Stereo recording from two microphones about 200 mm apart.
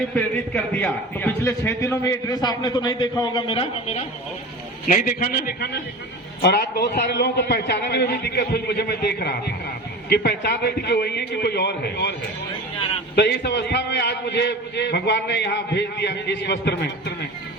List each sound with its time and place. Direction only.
0.1 s a man's voice: 5° left (ahead or behind); by 4.0 s 30° left (ahead or behind)
4.9 s a man's voice: 45° left (ahead or behind)
13.1 s a man's voice: 60° left (ahead or behind)